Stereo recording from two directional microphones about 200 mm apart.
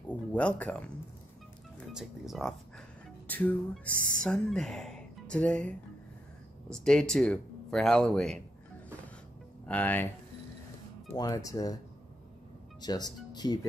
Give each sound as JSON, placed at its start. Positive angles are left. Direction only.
{"t": 0.1, "sound": "speech", "side_deg": 5}
{"t": 1.9, "sound": "speech", "side_deg": 0}
{"t": 3.3, "sound": "music", "side_deg": 10}
{"t": 4.1, "sound": "speech", "side_deg": 5}
{"t": 9.7, "sound": "music", "side_deg": 10}
{"t": 11.1, "sound": "music", "side_deg": 15}
{"t": 12.8, "sound": "speech", "side_deg": 20}